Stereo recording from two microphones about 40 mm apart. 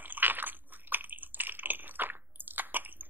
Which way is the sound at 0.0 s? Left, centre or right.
Right.